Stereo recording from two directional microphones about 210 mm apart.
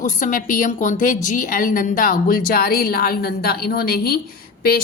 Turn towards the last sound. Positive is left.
turn(degrees=45)  # may be behind; listen again after turning